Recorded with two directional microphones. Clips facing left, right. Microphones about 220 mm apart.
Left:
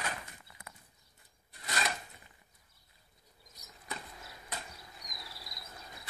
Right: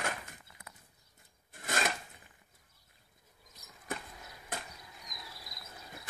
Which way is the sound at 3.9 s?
50° right (ahead or behind).